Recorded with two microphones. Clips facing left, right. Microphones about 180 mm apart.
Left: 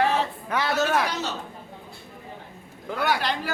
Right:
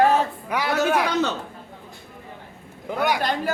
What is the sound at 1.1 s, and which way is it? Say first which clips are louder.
Speech: right 7 dB; 55° right (ahead or behind).